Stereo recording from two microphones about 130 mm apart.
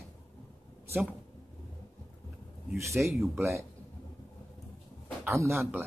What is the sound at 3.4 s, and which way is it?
Speech, 20° right (ahead or behind).